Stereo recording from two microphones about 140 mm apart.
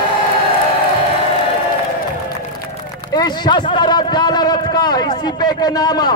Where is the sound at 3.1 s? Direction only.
30° left (ahead or behind).